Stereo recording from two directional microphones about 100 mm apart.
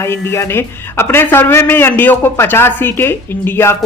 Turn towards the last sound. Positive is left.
turn(degrees=20)  # may be behind; listen again after turning